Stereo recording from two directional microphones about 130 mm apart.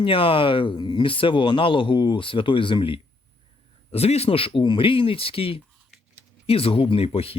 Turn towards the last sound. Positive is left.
turn(degrees=45)  # may be behind; listen again after turning